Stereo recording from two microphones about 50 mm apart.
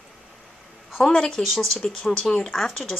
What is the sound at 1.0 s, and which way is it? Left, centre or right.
A woman's voice, centre.